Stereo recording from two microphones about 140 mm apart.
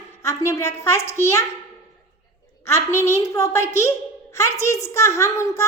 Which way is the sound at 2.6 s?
20° left (ahead or behind).